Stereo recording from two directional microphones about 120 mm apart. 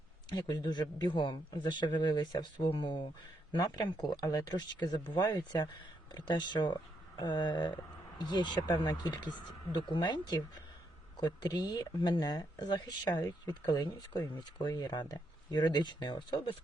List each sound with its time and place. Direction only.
0.3 s speech: 35° left (ahead or behind)